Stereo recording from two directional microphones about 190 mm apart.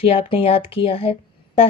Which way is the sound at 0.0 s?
30° left (ahead or behind).